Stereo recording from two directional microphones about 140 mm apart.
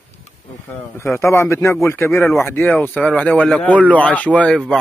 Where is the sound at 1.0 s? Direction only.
20° left (ahead or behind).